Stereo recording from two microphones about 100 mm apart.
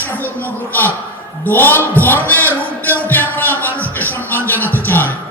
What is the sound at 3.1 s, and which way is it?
Music, 20° left (ahead or behind).